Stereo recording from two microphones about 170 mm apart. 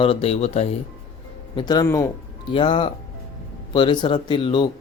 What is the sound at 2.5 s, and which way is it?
Speech, 30° left (ahead or behind).